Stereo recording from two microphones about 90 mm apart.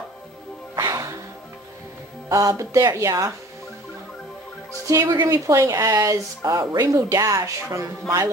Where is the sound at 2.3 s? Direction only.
40° right (ahead or behind).